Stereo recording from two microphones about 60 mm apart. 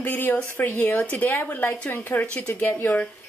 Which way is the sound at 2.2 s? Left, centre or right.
Left.